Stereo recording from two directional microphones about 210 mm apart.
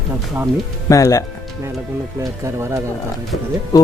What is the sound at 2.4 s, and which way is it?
Speech, 15° right (ahead or behind).